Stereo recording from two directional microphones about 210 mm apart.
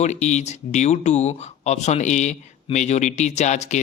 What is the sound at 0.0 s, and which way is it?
Speech, 35° left (ahead or behind).